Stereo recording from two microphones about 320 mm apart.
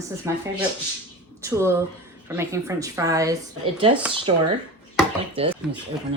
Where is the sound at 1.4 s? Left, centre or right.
Centre.